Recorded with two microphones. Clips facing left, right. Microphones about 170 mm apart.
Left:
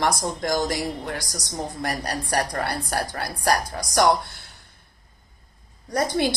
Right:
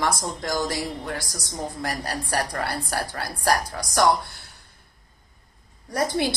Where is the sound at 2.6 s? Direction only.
20° left (ahead or behind).